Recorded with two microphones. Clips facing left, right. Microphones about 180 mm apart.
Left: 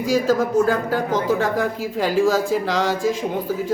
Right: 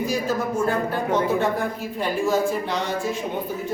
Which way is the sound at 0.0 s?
90° left.